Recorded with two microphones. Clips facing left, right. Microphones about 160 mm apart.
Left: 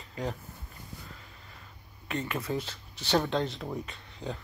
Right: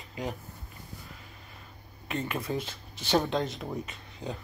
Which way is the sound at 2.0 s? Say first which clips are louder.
Even; 20° right (ahead or behind).